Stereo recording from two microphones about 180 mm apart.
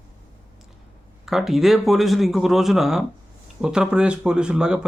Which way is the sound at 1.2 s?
Centre (ahead or behind).